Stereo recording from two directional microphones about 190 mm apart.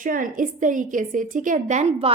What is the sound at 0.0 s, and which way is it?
A woman's voice, 45° right (ahead or behind).